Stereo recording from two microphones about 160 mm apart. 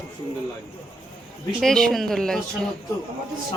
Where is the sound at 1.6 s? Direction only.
5° left (ahead or behind).